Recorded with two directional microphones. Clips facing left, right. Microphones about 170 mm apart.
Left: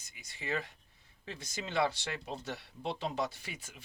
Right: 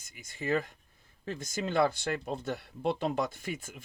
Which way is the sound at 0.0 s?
50° right (ahead or behind).